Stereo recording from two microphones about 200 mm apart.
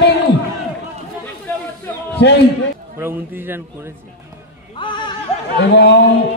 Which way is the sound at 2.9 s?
10° right (ahead or behind).